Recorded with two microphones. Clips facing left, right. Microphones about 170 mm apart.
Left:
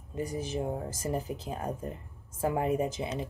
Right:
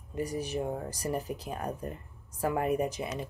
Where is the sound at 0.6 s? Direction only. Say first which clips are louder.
Even; 25° left (ahead or behind).